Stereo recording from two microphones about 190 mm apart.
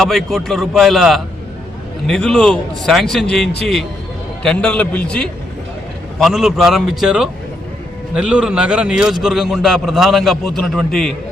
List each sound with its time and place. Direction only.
0.0 s a man's voice: centre (ahead or behind)